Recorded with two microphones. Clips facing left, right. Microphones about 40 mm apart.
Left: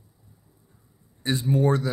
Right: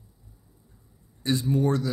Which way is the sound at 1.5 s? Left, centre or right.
Left.